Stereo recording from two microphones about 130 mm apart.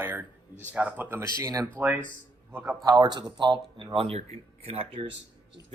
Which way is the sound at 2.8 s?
30° right (ahead or behind).